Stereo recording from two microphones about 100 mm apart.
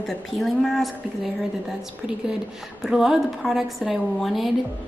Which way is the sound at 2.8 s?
5° right (ahead or behind).